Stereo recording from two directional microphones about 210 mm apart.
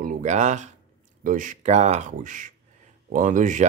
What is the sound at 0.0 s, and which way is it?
Speech, 35° right (ahead or behind).